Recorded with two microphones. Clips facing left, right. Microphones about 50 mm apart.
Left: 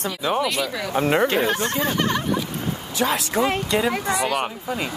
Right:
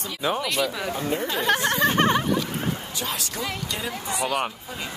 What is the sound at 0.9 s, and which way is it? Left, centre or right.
Speech, left.